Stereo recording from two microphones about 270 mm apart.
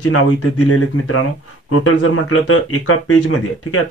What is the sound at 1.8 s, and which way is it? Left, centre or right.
Speech, left.